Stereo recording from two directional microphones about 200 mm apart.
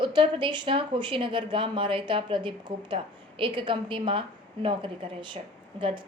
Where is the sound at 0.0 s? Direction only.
25° right (ahead or behind).